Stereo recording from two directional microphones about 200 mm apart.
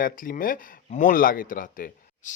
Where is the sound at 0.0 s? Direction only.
45° left (ahead or behind).